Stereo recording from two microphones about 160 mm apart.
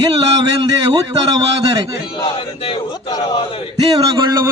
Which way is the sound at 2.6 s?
30° left (ahead or behind).